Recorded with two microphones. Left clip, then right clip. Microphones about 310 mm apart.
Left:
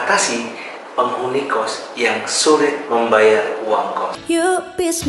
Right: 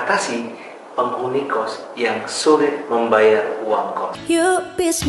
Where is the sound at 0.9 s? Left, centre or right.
Right.